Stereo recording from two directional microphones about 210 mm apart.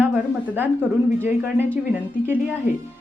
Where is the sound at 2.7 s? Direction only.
40° left (ahead or behind).